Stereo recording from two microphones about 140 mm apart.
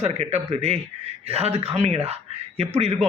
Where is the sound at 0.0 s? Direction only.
50° right (ahead or behind).